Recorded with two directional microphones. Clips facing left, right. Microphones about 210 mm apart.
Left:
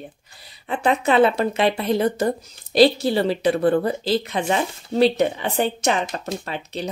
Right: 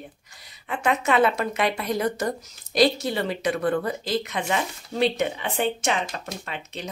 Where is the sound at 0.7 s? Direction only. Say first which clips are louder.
Left 4 dB; 30° left (ahead or behind).